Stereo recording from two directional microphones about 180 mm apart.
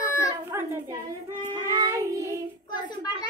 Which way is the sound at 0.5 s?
15° right (ahead or behind).